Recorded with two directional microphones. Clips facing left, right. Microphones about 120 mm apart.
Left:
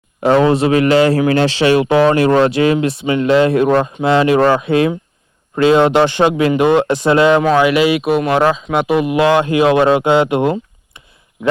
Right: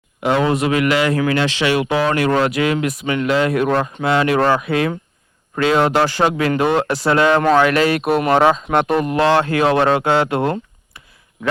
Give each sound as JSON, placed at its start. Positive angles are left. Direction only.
{"t": 0.2, "sound": "a man's voice", "side_deg": 35}